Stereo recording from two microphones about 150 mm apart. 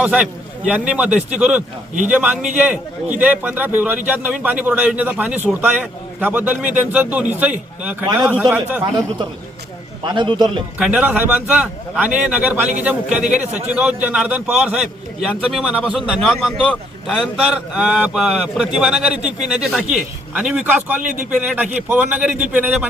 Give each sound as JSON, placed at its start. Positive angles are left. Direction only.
{"t": 0.0, "sound": "speech", "side_deg": -10}
{"t": 10.0, "sound": "a man's voice", "side_deg": -30}
{"t": 10.8, "sound": "a man's voice", "side_deg": -5}